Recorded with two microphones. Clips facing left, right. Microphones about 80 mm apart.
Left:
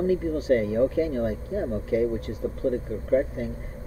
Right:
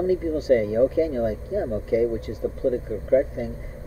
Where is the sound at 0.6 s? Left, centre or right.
Right.